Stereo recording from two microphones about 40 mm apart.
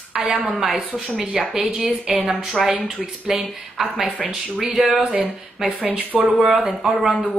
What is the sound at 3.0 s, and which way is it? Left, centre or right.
Speech, centre.